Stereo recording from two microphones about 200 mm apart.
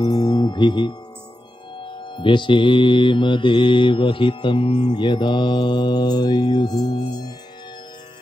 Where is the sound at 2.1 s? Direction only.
25° left (ahead or behind).